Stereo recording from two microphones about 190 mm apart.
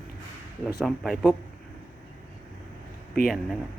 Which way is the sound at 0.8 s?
Centre (ahead or behind).